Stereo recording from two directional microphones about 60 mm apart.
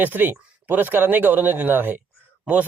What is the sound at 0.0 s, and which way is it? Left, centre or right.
A man's voice, right.